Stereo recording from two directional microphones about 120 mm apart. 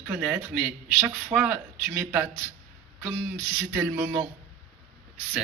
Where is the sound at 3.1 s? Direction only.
20° right (ahead or behind).